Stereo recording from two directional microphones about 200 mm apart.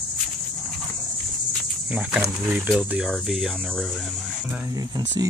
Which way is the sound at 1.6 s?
5° right (ahead or behind).